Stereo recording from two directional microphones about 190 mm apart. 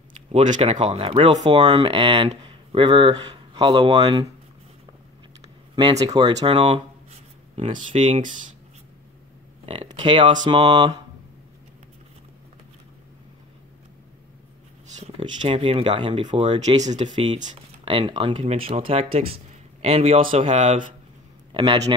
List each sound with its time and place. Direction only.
0.3 s speech: 35° right (ahead or behind)
5.8 s speech: 20° right (ahead or behind)
9.8 s speech: 25° right (ahead or behind)
15.0 s speech: 30° right (ahead or behind)
17.0 s speech: 25° right (ahead or behind)
21.5 s a man's voice: 25° right (ahead or behind)